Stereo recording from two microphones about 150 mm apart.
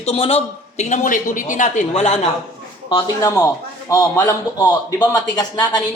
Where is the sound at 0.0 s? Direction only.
40° left (ahead or behind).